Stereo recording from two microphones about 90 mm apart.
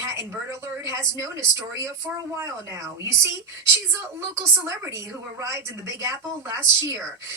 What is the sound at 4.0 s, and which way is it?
Speech, 30° right (ahead or behind).